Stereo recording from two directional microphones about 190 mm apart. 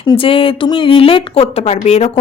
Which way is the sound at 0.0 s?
25° left (ahead or behind).